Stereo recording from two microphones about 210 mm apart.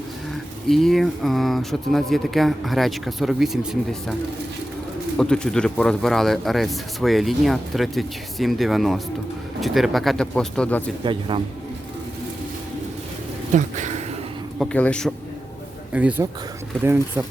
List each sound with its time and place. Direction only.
0.7 s speech: centre (ahead or behind)
5.1 s speech: 5° left (ahead or behind)
11.0 s a man's voice: 25° right (ahead or behind)
13.5 s speech: 35° right (ahead or behind)
14.6 s speech: 5° left (ahead or behind)
15.9 s speech: 5° right (ahead or behind)